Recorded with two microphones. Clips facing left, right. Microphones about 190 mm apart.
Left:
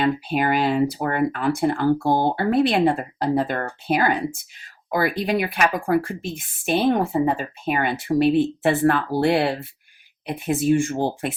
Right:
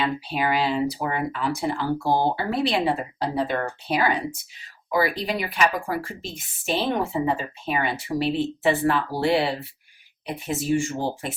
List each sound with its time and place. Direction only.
0.0 s speech: 50° left (ahead or behind)